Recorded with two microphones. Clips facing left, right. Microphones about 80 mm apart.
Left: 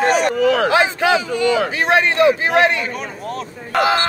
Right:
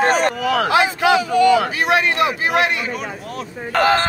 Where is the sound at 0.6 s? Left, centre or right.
Left.